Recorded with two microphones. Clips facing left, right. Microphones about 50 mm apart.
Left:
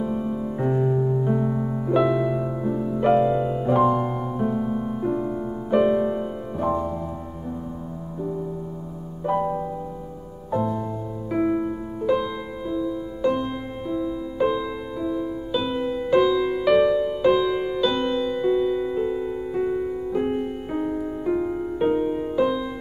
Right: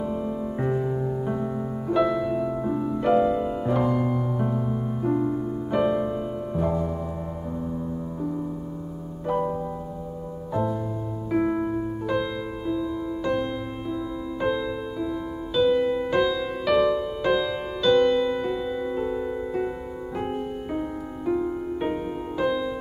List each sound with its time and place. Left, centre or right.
0.0 s music: centre
2.6 s music: centre
3.0 s music: centre
9.2 s music: centre
11.2 s music: centre
12.1 s music: centre